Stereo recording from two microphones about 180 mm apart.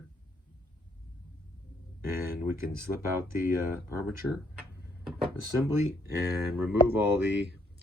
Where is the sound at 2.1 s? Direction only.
15° right (ahead or behind).